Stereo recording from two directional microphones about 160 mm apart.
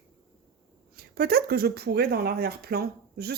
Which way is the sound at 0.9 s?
75° right (ahead or behind).